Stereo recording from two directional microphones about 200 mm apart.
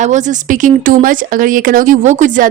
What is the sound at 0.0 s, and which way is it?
A woman's voice, 35° right (ahead or behind).